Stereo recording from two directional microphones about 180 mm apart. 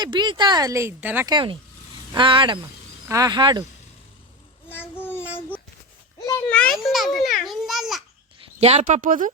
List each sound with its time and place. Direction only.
0.0 s speech: 25° right (ahead or behind)
1.3 s speech: 25° right (ahead or behind)
4.7 s child singing: 10° left (ahead or behind)
6.1 s a child's voice: 20° left (ahead or behind)
6.5 s a child's voice: 5° left (ahead or behind)
8.6 s speech: 40° right (ahead or behind)